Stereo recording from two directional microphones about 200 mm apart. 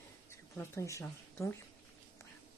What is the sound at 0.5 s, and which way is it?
Speech, 15° left (ahead or behind).